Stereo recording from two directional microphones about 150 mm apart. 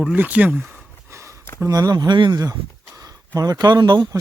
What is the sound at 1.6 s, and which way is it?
Speech, 25° right (ahead or behind).